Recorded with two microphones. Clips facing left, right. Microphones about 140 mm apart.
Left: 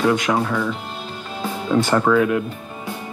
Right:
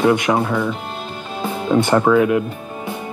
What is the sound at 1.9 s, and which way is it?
Speech, 15° right (ahead or behind).